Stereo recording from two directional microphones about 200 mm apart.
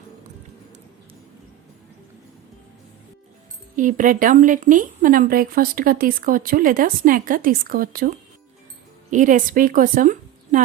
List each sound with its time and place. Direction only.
3.8 s a woman's voice: 40° right (ahead or behind)